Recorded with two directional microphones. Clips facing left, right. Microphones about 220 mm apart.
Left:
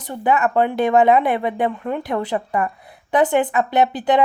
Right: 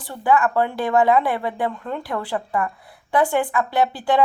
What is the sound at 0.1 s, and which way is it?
Speech, 20° left (ahead or behind).